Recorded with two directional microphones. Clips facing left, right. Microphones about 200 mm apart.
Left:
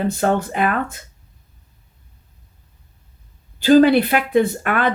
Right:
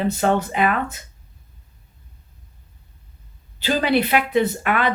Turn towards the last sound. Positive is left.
turn(degrees=45)  # may be behind; listen again after turning